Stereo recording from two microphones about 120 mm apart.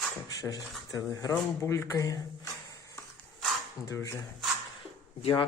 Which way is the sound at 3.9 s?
25° left (ahead or behind).